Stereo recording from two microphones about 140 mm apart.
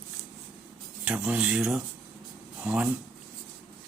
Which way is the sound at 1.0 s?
10° right (ahead or behind).